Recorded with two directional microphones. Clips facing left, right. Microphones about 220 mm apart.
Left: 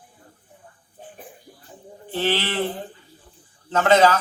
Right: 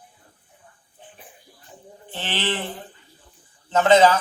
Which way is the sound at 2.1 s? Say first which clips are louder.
Left 4 dB; 20° right (ahead or behind).